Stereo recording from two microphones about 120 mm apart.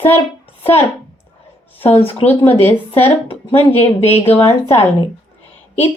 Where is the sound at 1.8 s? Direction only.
55° left (ahead or behind).